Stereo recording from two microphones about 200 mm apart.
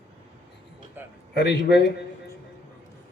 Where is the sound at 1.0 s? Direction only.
10° right (ahead or behind).